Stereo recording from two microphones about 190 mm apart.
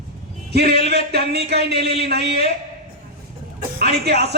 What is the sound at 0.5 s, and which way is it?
Speech, 55° right (ahead or behind).